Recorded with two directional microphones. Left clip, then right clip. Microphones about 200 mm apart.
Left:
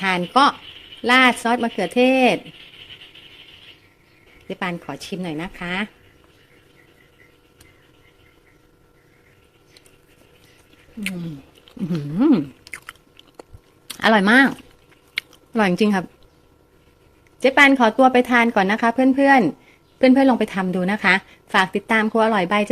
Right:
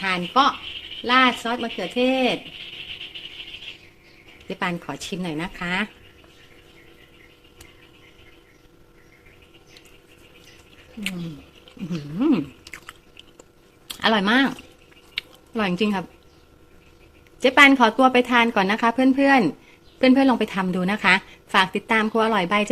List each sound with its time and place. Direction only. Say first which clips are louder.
0.0 s speech: left 3 dB; 30° left (ahead or behind)
4.4 s a woman's voice: even; 10° left (ahead or behind)
11.6 s chewing: left 5 dB; 25° left (ahead or behind)
13.8 s speech: left 4 dB; 20° left (ahead or behind)
15.1 s a sound: left 4 dB; 20° left (ahead or behind)
17.4 s a woman's voice: even; 10° left (ahead or behind)